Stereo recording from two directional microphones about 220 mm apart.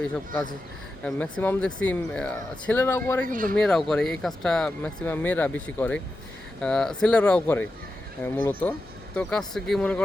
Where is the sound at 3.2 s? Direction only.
40° right (ahead or behind).